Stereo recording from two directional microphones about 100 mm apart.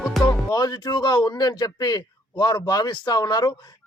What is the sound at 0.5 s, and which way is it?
A man's voice, 45° left (ahead or behind).